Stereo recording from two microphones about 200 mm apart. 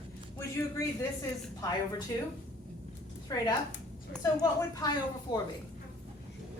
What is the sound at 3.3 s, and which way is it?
Speech, 20° left (ahead or behind).